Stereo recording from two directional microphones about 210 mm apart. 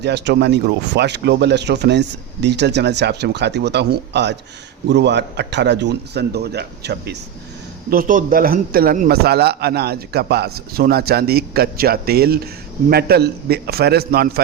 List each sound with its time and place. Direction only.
0.0 s a man's voice: 55° right (ahead or behind)
7.9 s a man's voice: 40° right (ahead or behind)